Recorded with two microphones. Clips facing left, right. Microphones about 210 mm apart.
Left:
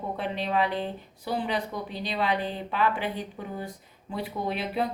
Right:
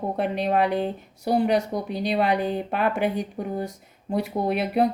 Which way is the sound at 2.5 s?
55° right (ahead or behind).